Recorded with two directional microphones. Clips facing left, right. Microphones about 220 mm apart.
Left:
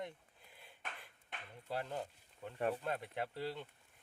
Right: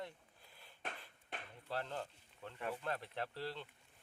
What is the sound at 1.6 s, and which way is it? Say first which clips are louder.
Speech: left 2 dB; 15° left (ahead or behind).